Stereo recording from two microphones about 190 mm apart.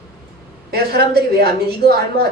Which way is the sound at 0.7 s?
55° right (ahead or behind).